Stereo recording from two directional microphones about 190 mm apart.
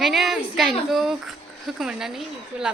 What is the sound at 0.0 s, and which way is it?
A woman's voice, centre (ahead or behind).